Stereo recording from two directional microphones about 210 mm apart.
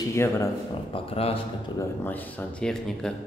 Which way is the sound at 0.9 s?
25° left (ahead or behind).